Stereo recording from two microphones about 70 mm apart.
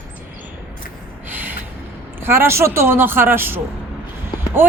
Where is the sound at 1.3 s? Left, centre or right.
Right.